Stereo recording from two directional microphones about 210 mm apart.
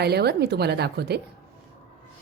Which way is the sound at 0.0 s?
50° right (ahead or behind).